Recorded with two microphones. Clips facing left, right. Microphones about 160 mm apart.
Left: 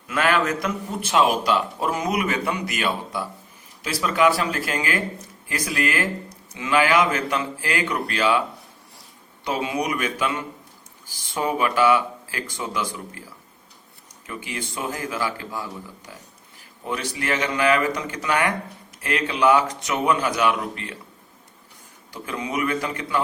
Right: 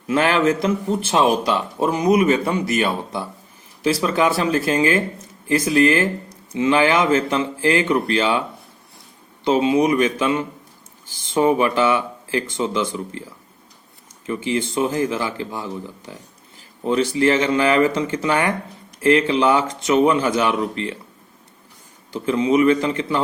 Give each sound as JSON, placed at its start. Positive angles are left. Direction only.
{"t": 0.1, "sound": "speech", "side_deg": -30}
{"t": 14.3, "sound": "speech", "side_deg": -25}
{"t": 22.1, "sound": "speech", "side_deg": -25}